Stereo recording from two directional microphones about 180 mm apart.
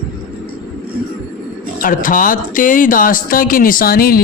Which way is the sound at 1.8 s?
50° left (ahead or behind).